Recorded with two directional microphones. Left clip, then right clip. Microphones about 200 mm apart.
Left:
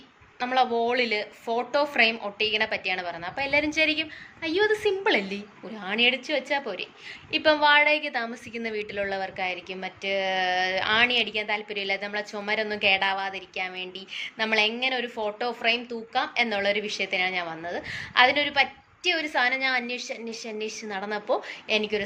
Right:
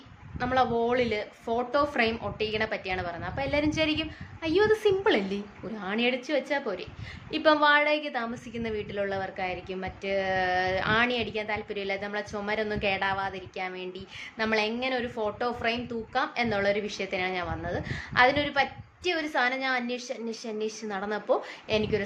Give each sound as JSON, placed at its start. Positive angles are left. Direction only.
{"t": 0.3, "sound": "a woman's voice", "side_deg": -15}